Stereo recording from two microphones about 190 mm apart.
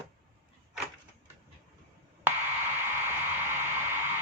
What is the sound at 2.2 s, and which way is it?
Radio, 10° right (ahead or behind).